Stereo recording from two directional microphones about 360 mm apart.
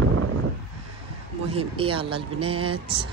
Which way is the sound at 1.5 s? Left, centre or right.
Centre.